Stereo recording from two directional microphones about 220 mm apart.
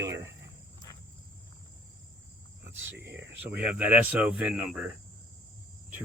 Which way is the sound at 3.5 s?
5° right (ahead or behind).